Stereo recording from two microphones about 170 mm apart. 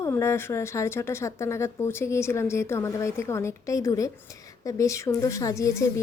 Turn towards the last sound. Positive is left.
turn(degrees=20)  # may be behind; listen again after turning